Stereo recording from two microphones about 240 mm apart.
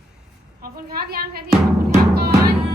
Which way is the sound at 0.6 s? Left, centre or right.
Right.